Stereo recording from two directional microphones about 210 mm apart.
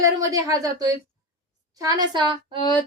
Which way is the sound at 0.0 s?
15° right (ahead or behind).